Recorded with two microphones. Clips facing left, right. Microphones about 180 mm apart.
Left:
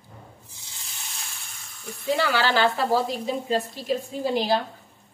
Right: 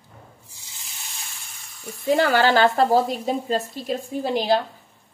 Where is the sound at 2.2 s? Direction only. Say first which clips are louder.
Right 5 dB; 50° right (ahead or behind).